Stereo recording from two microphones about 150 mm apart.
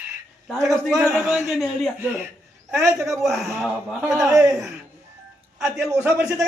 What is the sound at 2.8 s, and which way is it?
Speech, 20° right (ahead or behind).